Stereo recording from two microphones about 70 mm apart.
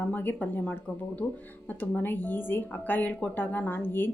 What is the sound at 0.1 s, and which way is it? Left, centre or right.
A woman's voice, left.